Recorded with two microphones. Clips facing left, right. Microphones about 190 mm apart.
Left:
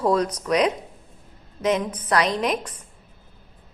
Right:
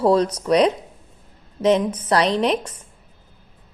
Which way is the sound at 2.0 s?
30° right (ahead or behind).